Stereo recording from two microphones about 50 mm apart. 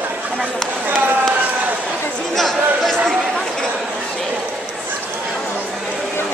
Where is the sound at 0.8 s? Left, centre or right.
Right.